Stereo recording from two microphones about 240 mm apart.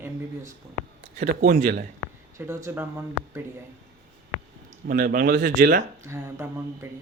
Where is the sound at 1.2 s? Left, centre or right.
Right.